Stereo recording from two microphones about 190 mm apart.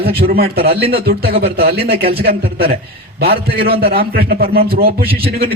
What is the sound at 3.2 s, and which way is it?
A man's voice, 55° right (ahead or behind).